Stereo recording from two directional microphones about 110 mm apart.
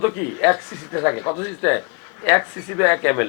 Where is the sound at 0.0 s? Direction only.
15° left (ahead or behind).